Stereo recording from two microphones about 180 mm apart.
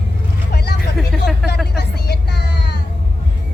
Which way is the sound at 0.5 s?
65° left (ahead or behind).